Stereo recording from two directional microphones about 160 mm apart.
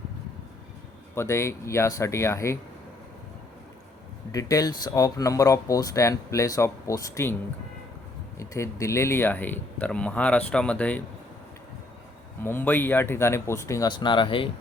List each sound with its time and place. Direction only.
1.1 s speech: 15° left (ahead or behind)
4.3 s speech: 20° left (ahead or behind)
8.4 s speech: 20° left (ahead or behind)
12.4 s speech: 15° left (ahead or behind); by 14.5 s 35° left (ahead or behind)